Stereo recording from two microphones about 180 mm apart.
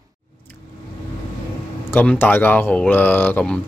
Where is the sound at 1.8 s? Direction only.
10° left (ahead or behind).